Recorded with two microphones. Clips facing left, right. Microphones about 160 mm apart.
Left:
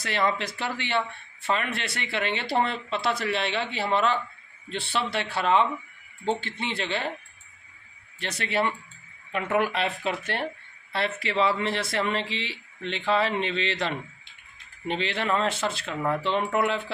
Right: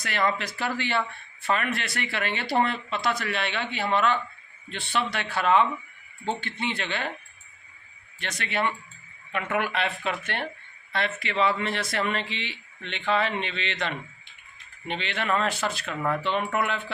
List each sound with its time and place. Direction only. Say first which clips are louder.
0.0 s speech: left 1 dB; 25° left (ahead or behind)
8.2 s speech: left 2 dB; 30° left (ahead or behind)